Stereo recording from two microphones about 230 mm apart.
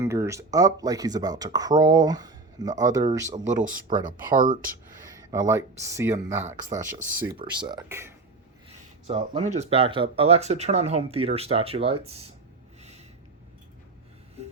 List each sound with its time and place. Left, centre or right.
0.0 s speech: centre
3.3 s speech: right
5.0 s speech: centre
9.0 s speech: right
14.4 s a sound: right